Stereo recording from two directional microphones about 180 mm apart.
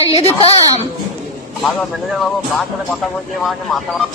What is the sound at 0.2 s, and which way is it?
Speech, 35° left (ahead or behind).